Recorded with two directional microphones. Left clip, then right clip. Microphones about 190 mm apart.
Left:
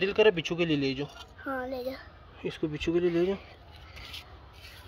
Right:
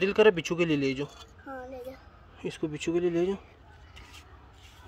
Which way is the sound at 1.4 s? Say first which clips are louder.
Left 7 dB; 45° left (ahead or behind).